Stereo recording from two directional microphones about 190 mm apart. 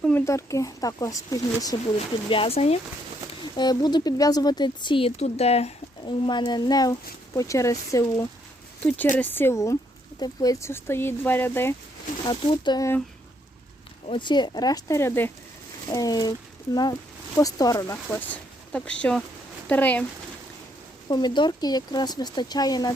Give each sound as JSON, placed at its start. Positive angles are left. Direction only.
{"t": 0.0, "sound": "speech", "side_deg": 10}
{"t": 2.0, "sound": "speech", "side_deg": 30}
{"t": 3.4, "sound": "speech", "side_deg": 20}
{"t": 8.8, "sound": "speech", "side_deg": 5}
{"t": 12.3, "sound": "speech", "side_deg": 25}
{"t": 14.1, "sound": "speech", "side_deg": 25}
{"t": 17.3, "sound": "speech", "side_deg": 20}
{"t": 21.1, "sound": "speech", "side_deg": 20}